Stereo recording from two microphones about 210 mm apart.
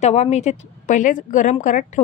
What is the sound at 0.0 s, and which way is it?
A woman's voice, 30° left (ahead or behind).